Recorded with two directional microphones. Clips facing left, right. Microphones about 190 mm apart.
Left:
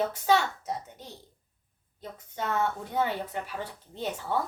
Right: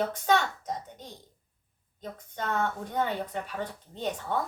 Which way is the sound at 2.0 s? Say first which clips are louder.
Left 1 dB; 5° left (ahead or behind).